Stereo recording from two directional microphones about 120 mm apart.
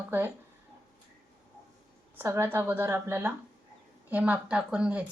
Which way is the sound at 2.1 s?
20° right (ahead or behind).